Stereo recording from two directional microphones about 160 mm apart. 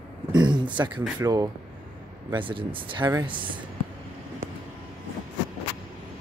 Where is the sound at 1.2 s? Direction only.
25° right (ahead or behind).